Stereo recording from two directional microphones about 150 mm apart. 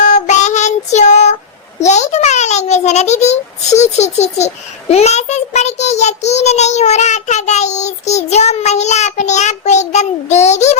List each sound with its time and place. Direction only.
0.0 s child singing: 50° left (ahead or behind)
1.8 s a child's voice: 50° left (ahead or behind)